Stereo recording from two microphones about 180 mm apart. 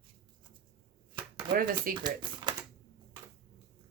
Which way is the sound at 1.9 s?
25° right (ahead or behind).